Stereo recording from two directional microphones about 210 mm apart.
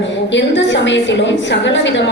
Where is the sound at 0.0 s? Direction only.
60° left (ahead or behind).